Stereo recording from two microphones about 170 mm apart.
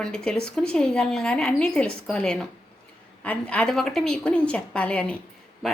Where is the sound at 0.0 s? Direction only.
5° left (ahead or behind).